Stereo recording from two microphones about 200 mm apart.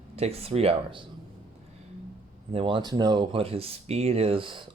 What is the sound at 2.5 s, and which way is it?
Speech, 25° right (ahead or behind).